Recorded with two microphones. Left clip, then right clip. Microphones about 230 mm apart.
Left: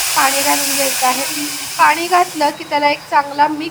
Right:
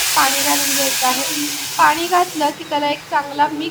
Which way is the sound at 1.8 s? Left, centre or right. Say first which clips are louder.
Left 2 dB; left.